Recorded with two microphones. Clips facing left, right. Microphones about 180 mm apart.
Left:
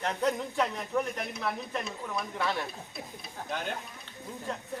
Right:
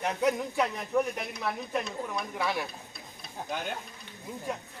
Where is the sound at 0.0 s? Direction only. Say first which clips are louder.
Right 2 dB; 10° right (ahead or behind).